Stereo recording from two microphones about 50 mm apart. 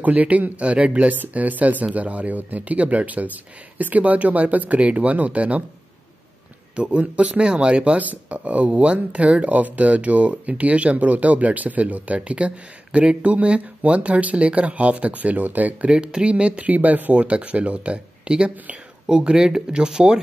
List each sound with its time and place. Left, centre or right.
0.0 s speech: right
6.7 s speech: right
15.9 s speech: centre